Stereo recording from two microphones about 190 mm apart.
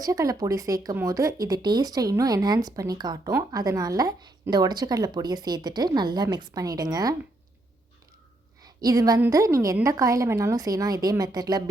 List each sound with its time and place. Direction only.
0.0 s speech: 20° right (ahead or behind)
8.6 s a woman's voice: 20° right (ahead or behind)